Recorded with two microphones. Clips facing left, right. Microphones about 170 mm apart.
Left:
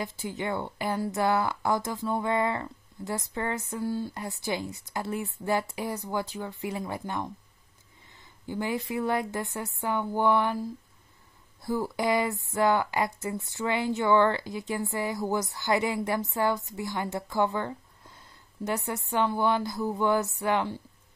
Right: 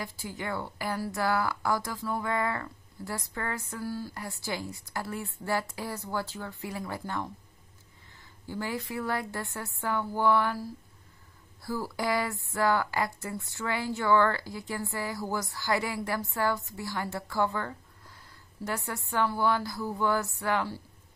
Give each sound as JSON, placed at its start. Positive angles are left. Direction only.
{"t": 0.0, "sound": "a woman's voice", "side_deg": 20}